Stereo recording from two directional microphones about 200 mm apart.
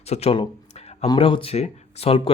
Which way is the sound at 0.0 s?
30° left (ahead or behind).